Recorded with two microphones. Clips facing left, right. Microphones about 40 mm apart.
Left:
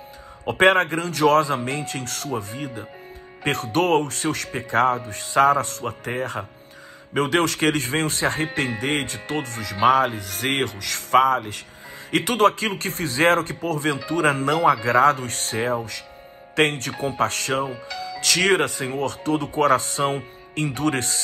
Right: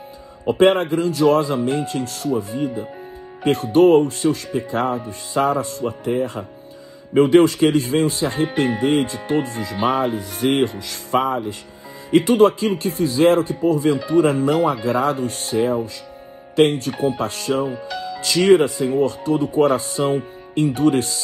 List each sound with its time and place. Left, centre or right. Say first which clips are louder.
0.5 s speech: right 2 dB; left
17.8 s music: right 4 dB; right
18.2 s speech: right 5 dB; left